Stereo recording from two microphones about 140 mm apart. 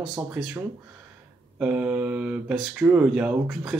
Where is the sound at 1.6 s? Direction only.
10° right (ahead or behind).